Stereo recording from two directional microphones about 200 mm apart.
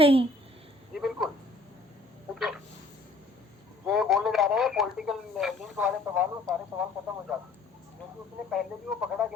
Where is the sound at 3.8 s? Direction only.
Centre (ahead or behind).